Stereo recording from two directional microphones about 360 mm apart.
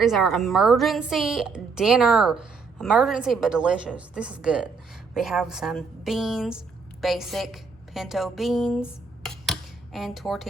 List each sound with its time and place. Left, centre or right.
0.0 s a woman's voice: centre